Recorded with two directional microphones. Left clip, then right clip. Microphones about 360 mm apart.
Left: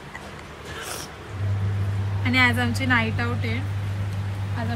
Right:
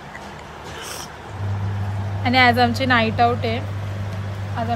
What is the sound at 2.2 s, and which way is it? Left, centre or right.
A woman's voice, centre.